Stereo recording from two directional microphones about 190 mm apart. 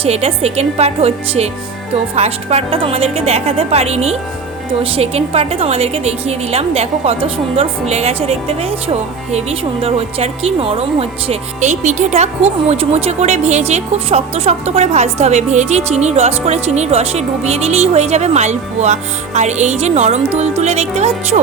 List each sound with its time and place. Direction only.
0.0 s a woman's voice: 30° right (ahead or behind)